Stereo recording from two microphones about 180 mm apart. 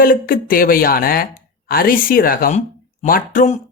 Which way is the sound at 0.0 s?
50° left (ahead or behind).